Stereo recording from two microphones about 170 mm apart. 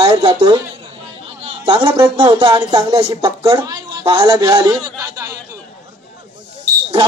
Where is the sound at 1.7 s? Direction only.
25° right (ahead or behind).